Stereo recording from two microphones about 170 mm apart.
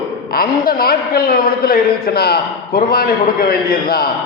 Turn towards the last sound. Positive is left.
turn(degrees=60)  # may be behind; listen again after turning